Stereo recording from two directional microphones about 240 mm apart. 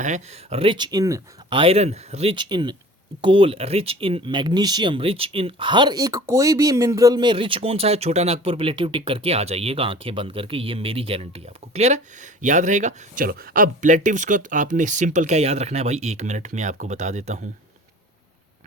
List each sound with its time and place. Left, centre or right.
0.0 s speech: right